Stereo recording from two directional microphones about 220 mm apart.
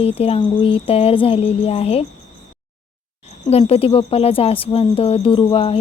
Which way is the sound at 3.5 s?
25° left (ahead or behind).